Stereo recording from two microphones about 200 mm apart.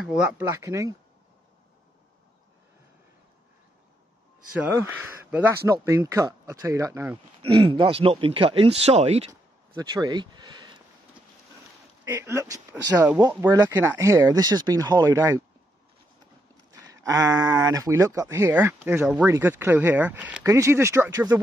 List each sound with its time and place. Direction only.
0.0 s speech: 5° right (ahead or behind)
0.6 s speech: 15° right (ahead or behind)
4.6 s speech: 15° right (ahead or behind)
7.7 s speech: 25° right (ahead or behind)
9.3 s a sound: 20° right (ahead or behind)
12.0 s speech: 15° right (ahead or behind)
16.8 s speech: 15° right (ahead or behind)